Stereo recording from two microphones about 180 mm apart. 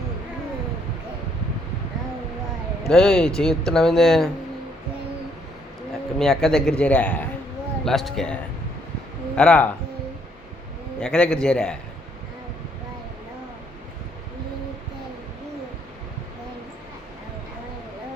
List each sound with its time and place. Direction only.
2.8 s a man's voice: 5° left (ahead or behind)
6.1 s a man's voice: centre (ahead or behind)
11.0 s a man's voice: 5° left (ahead or behind)